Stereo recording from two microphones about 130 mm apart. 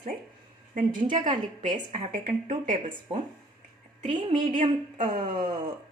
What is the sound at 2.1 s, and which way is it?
Speech, 85° right.